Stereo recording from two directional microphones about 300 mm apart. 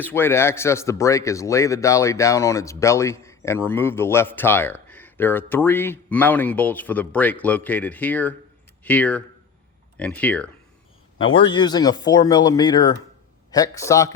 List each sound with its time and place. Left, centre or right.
0.0 s speech: centre
11.3 s speech: centre